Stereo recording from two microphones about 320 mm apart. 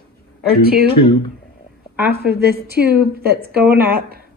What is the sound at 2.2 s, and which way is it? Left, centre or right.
A woman's voice, right.